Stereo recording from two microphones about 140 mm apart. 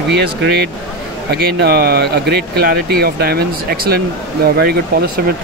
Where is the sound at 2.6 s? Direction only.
90° right.